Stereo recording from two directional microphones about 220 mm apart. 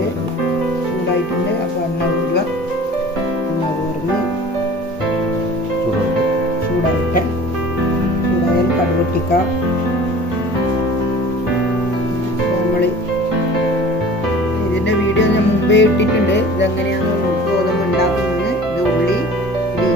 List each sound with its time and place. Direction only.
14.8 s music: 55° left (ahead or behind)